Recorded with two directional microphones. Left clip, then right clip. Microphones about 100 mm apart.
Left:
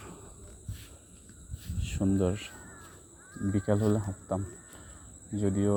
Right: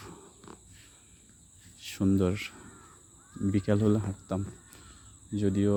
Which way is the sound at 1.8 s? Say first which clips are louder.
Right 1 dB; 55° right (ahead or behind).